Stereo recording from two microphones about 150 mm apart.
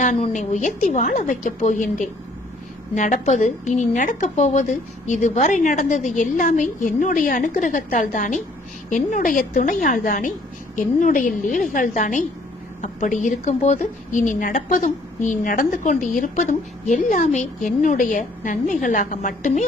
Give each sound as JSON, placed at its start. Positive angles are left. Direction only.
{"t": 0.0, "sound": "a woman's voice", "side_deg": 55}